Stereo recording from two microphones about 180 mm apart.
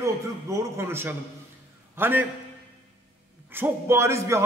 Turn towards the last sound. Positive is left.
turn(degrees=-15)  # may be behind; listen again after turning